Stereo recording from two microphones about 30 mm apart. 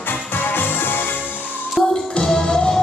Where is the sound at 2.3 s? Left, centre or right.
Left.